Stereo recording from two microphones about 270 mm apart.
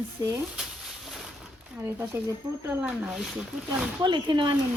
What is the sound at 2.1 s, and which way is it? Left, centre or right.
Speech, centre.